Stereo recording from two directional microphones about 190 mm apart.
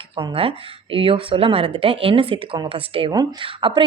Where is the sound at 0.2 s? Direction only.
30° right (ahead or behind).